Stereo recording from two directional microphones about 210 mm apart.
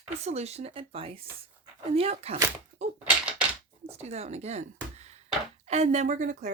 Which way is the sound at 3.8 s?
30° right (ahead or behind).